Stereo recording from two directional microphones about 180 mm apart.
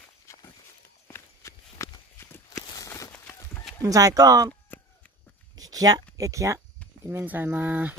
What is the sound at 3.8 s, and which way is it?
Speech, 20° right (ahead or behind).